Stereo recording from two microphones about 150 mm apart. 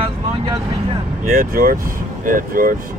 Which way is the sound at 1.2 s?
70° right (ahead or behind).